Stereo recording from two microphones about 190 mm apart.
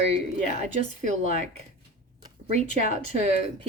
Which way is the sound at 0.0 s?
35° right (ahead or behind).